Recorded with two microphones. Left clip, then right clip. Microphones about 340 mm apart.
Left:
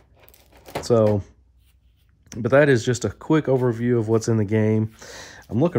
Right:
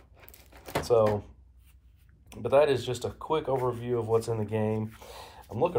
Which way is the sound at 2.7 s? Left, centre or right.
Left.